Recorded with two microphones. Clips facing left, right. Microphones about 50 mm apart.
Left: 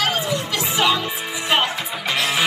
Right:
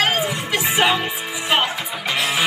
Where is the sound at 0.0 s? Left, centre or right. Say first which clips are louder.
Right 1 dB; right.